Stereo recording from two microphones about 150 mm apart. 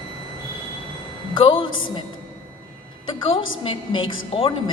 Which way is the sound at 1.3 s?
35° left (ahead or behind).